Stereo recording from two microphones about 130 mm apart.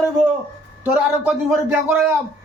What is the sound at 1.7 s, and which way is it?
Speech, 15° right (ahead or behind).